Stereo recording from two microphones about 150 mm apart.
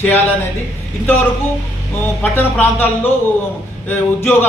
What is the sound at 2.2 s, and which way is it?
Speech, 10° left (ahead or behind).